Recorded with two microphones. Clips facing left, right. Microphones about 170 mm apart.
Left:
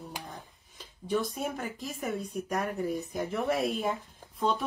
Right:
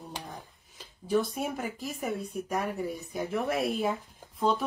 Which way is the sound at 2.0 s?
Centre (ahead or behind).